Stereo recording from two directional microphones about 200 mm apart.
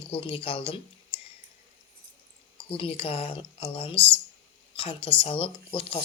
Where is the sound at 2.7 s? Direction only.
25° left (ahead or behind).